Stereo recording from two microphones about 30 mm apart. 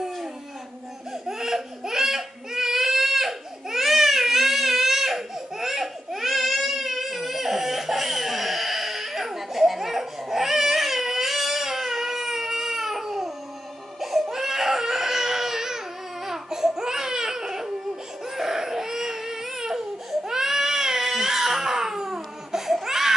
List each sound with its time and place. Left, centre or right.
1.2 s baby cry: centre
14.3 s crying: centre
16.3 s a sound: centre
18.3 s baby cry: centre